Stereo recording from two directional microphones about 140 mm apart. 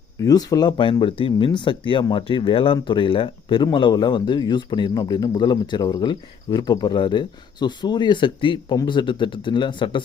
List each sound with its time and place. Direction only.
0.2 s speech: 25° left (ahead or behind)